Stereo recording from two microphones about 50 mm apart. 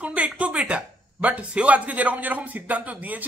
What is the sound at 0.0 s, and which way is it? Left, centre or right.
Speech, right.